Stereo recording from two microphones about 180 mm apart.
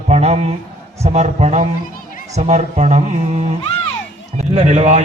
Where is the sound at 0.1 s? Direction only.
35° right (ahead or behind).